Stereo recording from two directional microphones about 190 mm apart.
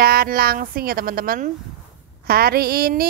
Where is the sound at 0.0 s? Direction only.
50° right (ahead or behind).